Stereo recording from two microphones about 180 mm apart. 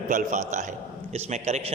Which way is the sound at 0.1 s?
45° right (ahead or behind).